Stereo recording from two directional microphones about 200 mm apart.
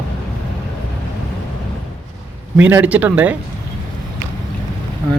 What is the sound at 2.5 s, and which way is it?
Speech, 10° right (ahead or behind).